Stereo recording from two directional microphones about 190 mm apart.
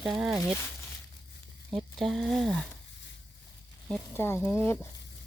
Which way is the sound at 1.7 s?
Centre (ahead or behind).